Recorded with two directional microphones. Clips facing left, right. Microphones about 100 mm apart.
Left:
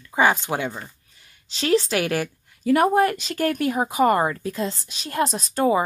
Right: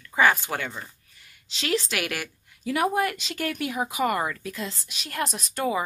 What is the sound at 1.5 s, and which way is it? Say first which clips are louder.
Speech: left 7 dB; 35° left (ahead or behind).